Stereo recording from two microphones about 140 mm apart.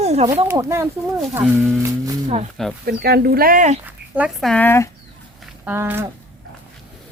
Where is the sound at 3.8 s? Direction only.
10° right (ahead or behind).